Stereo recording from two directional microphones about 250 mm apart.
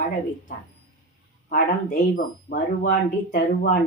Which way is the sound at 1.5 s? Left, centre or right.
Left.